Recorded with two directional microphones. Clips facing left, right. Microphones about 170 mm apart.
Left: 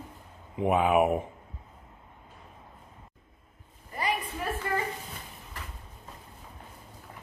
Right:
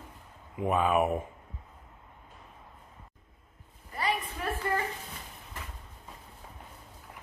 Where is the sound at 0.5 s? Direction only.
15° left (ahead or behind).